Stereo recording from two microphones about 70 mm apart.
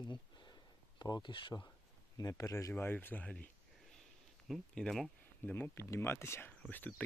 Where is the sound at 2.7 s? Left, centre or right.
Left.